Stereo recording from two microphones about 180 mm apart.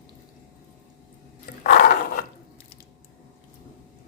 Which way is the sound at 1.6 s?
55° left (ahead or behind).